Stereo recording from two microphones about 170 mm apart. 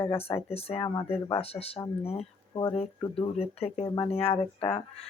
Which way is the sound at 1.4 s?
35° left (ahead or behind).